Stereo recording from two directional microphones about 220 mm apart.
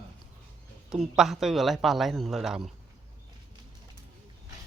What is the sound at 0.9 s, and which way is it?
Speech, centre (ahead or behind).